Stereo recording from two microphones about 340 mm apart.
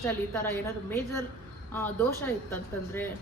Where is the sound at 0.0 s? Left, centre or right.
Centre.